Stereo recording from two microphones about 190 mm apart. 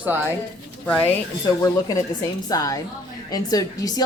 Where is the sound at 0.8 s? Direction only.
5° left (ahead or behind).